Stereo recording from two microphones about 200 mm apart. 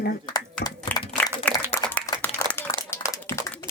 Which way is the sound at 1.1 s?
10° left (ahead or behind).